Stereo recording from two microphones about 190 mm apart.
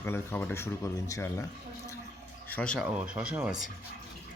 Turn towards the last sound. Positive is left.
turn(degrees=-5)  # may be behind; listen again after turning